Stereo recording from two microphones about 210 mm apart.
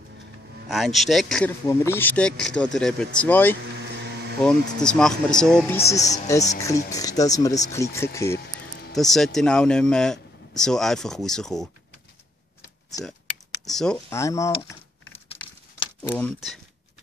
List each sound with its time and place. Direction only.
0.7 s speech: centre (ahead or behind)
3.7 s vehicle: 55° right (ahead or behind)
4.4 s speech: 5° left (ahead or behind)
5.9 s speech: 15° left (ahead or behind)
8.9 s speech: centre (ahead or behind)
13.7 s speech: centre (ahead or behind)
14.1 s speech: 15° left (ahead or behind)
16.0 s speech: 10° left (ahead or behind)